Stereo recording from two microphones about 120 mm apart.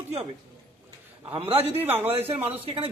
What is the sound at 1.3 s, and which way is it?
Speech, 55° right (ahead or behind).